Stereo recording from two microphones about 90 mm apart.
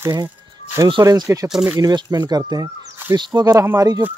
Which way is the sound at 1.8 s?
50° right (ahead or behind).